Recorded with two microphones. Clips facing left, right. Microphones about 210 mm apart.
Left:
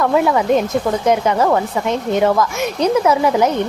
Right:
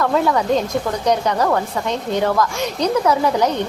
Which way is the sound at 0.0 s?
15° left (ahead or behind).